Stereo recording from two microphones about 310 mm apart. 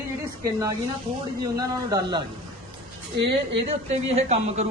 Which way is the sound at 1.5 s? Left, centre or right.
Centre.